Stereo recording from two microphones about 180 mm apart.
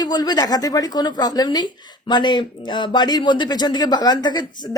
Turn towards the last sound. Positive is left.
turn(degrees=25)  # may be behind; listen again after turning